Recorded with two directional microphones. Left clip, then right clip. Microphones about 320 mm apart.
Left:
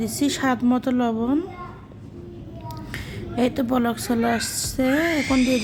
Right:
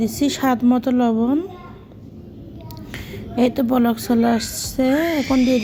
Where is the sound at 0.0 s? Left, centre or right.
Centre.